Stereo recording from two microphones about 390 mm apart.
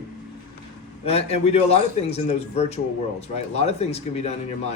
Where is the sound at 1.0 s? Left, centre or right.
Centre.